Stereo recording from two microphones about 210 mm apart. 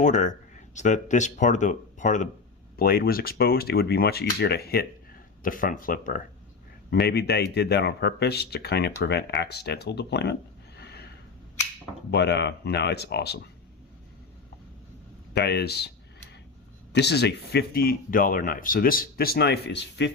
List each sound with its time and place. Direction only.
0.0 s speech: 35° left (ahead or behind)
6.9 s speech: 50° left (ahead or behind)
10.8 s a sound: 50° left (ahead or behind)
12.1 s speech: 50° left (ahead or behind)
15.3 s a sound: 50° left (ahead or behind)
16.9 s speech: 55° left (ahead or behind)